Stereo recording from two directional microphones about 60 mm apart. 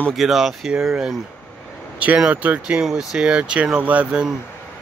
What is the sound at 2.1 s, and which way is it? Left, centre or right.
Speech, right.